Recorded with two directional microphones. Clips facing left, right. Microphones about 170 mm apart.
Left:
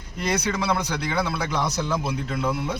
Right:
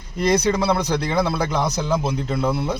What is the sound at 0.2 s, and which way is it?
Speech, 35° right (ahead or behind).